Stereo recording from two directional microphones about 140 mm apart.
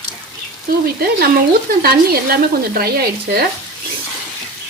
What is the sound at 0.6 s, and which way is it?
Stir, 90° right.